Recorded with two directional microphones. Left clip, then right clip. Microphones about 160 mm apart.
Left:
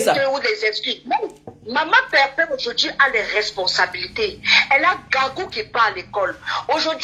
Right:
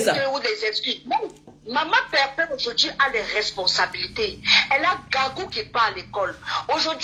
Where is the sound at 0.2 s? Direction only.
30° left (ahead or behind).